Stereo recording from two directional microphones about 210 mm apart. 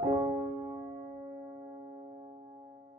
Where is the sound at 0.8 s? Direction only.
35° right (ahead or behind).